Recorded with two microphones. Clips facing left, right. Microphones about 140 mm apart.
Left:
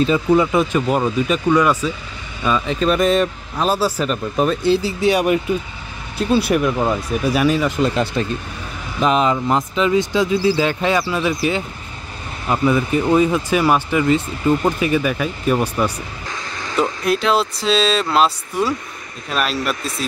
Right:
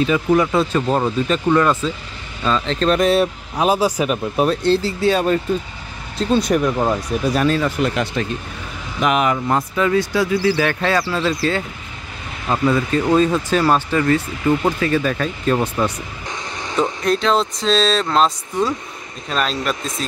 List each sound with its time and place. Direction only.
0.3 s speech: 15° left (ahead or behind); by 3.3 s centre (ahead or behind)
3.5 s speech: 15° right (ahead or behind)
4.5 s speech: 10° left (ahead or behind)
7.8 s speech: 30° left (ahead or behind); by 15.7 s 10° left (ahead or behind)
16.3 s vehicle: 20° right (ahead or behind)
17.0 s speech: 5° left (ahead or behind)